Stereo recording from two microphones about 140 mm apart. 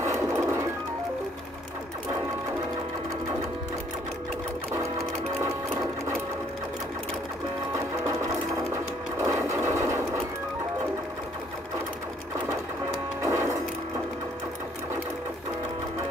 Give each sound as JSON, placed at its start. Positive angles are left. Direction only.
{"t": 0.0, "sound": "music", "side_deg": -20}
{"t": 8.0, "sound": "sewing machine", "side_deg": -20}
{"t": 13.2, "sound": "music", "side_deg": -20}